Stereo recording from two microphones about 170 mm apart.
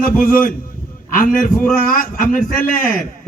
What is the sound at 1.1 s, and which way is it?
A man's voice, 55° left (ahead or behind).